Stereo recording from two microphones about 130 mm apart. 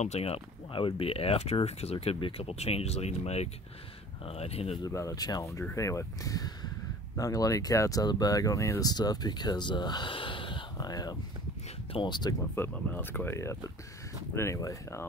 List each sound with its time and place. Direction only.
0.0 s speech: 55° left (ahead or behind)
4.8 s speech: 25° left (ahead or behind)
12.5 s speech: 15° left (ahead or behind)